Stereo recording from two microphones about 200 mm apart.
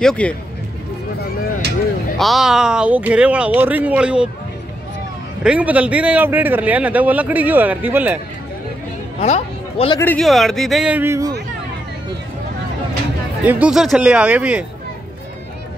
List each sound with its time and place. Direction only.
0.0 s speech: 5° left (ahead or behind)
2.1 s speech: centre (ahead or behind)
5.4 s a man's voice: 5° right (ahead or behind)
9.2 s speech: 30° left (ahead or behind)
9.9 s speech: 5° left (ahead or behind); by 11.3 s 15° right (ahead or behind)
13.5 s speech: 5° right (ahead or behind)